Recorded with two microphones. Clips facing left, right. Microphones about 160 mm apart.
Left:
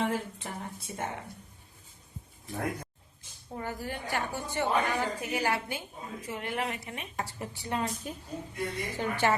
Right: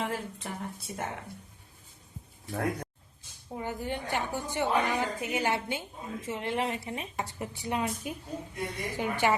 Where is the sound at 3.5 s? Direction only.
15° right (ahead or behind).